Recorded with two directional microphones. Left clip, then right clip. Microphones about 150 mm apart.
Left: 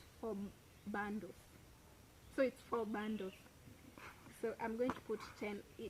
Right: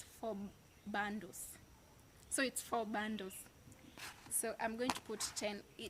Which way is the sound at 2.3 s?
35° right (ahead or behind).